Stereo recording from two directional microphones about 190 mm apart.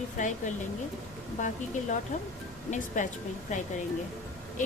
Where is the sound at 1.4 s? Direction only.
40° left (ahead or behind).